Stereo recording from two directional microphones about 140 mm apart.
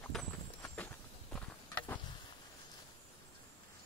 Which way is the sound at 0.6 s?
10° left (ahead or behind).